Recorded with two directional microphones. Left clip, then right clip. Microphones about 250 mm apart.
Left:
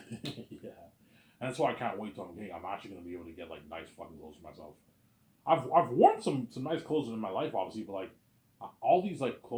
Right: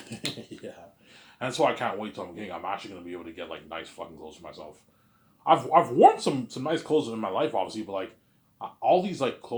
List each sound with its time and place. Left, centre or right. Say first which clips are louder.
1.4 s speech: right 7 dB; right